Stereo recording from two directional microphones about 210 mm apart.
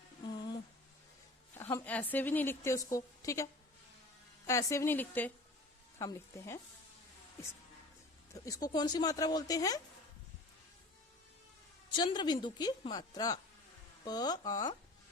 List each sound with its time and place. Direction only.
1.5 s a woman's voice: 10° left (ahead or behind)
8.3 s a woman's voice: 15° left (ahead or behind)
11.9 s a woman's voice: 20° left (ahead or behind)